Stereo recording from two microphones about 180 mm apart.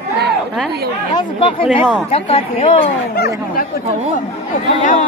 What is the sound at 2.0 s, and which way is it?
Speech, 35° left (ahead or behind).